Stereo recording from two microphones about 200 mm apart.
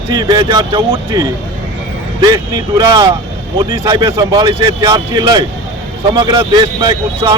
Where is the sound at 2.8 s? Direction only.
20° right (ahead or behind).